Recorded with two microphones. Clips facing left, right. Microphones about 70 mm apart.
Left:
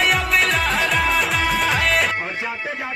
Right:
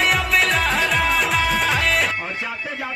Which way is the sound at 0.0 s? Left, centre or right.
Centre.